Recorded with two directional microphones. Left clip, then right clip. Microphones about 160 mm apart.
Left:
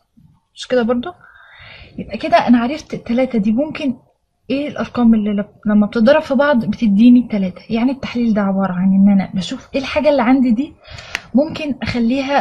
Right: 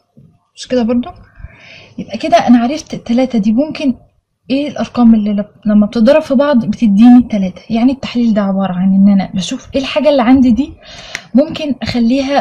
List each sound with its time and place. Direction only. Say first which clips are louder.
0.6 s speech: right 2 dB; 35° left (ahead or behind)
1.7 s a woman's voice: right 3 dB; 25° left (ahead or behind)